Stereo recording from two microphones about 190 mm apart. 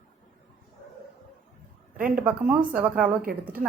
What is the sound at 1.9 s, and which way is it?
Speech, 45° right (ahead or behind).